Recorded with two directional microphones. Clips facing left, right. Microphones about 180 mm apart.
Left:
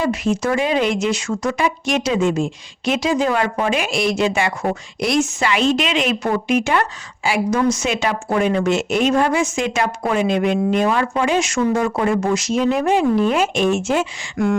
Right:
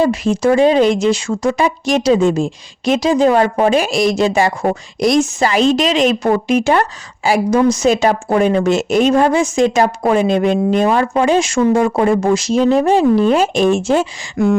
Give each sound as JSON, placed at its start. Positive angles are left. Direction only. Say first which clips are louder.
{"t": 0.0, "sound": "speech", "louder": "right 5 dB", "side_deg": -35}